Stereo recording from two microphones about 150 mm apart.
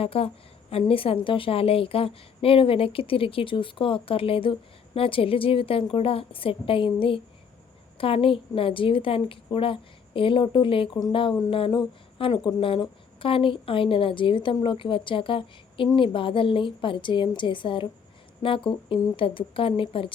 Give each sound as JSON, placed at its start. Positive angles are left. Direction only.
{"t": 0.0, "sound": "speech", "side_deg": 40}